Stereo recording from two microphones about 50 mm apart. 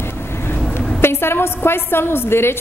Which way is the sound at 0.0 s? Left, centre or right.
Left.